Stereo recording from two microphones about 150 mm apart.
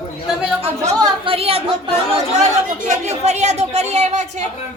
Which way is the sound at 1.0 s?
35° right (ahead or behind).